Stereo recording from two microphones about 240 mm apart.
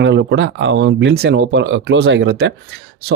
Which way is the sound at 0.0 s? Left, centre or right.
Right.